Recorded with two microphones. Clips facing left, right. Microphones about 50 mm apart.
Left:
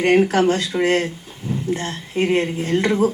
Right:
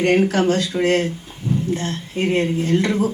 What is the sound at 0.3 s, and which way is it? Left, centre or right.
Speech, left.